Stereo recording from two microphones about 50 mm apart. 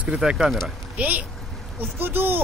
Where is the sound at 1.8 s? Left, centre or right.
Right.